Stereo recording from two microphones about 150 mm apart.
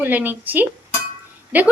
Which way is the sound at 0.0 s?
10° right (ahead or behind).